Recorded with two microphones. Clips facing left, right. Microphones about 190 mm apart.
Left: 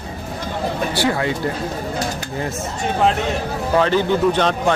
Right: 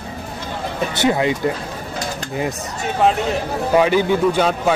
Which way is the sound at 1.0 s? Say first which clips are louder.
Right 4 dB; 20° right (ahead or behind).